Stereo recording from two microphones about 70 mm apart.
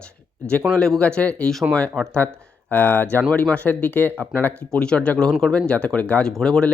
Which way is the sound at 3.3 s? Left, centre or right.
Centre.